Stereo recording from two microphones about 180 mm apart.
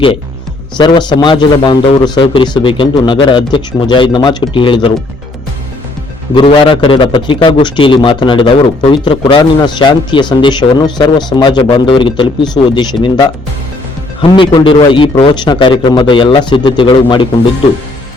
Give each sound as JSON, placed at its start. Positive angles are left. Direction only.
{"t": 0.8, "sound": "a man's voice", "side_deg": 25}
{"t": 6.3, "sound": "a man's voice", "side_deg": 30}